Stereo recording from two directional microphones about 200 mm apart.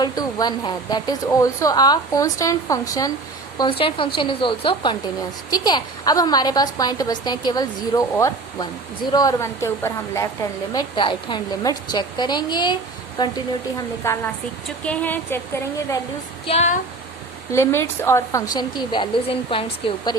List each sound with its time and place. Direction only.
0.0 s a woman's voice: 20° left (ahead or behind)
10.8 s a woman's voice: 25° left (ahead or behind); by 15.4 s 10° left (ahead or behind)
16.5 s speech: 30° left (ahead or behind)
17.5 s a woman's voice: 15° left (ahead or behind)